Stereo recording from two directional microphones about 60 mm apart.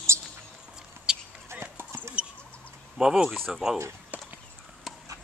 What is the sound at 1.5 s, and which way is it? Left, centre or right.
Clip-clop, right.